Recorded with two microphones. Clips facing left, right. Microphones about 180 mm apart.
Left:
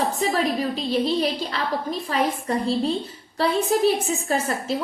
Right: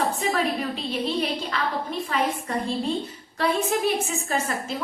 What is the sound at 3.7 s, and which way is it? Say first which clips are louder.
Speech: left 5 dB; 35° left (ahead or behind).